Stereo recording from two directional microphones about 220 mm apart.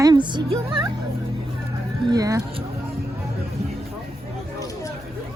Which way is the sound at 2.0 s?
15° right (ahead or behind).